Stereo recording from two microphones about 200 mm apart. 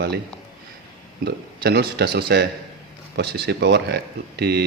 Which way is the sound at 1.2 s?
55° right (ahead or behind).